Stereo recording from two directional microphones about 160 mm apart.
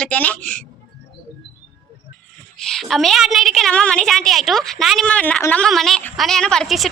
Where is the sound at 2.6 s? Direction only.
Centre (ahead or behind).